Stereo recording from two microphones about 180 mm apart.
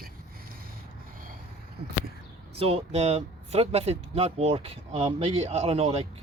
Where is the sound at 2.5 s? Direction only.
30° right (ahead or behind).